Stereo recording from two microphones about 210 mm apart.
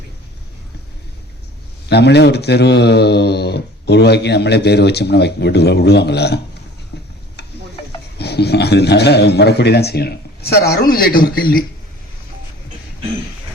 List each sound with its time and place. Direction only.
1.9 s speech: 55° left (ahead or behind)
6.9 s tick-tock: 50° left (ahead or behind)
8.2 s speech: 50° left (ahead or behind)